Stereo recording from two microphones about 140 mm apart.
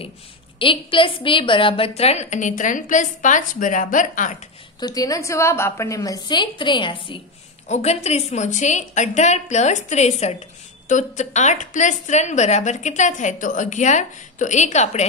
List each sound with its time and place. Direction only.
0.6 s a woman's voice: 40° left (ahead or behind); by 4.4 s 65° left (ahead or behind)
4.7 s a woman's voice: 30° left (ahead or behind)
7.6 s a woman's voice: 55° left (ahead or behind)